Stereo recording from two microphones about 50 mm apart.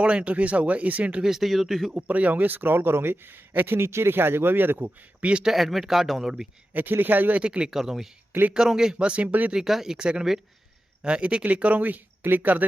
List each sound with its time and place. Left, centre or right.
0.0 s speech: right
1.2 s speech: centre
2.0 s speech: right
4.8 s speech: right
5.4 s speech: centre
6.7 s speech: right
7.4 s speech: centre
7.7 s speech: centre
8.3 s speech: right
8.5 s speech: centre
9.0 s speech: right
9.5 s speech: centre
11.4 s speech: right